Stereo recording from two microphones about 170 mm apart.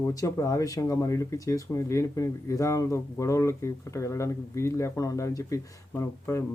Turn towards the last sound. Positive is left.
turn(degrees=15)  # may be behind; listen again after turning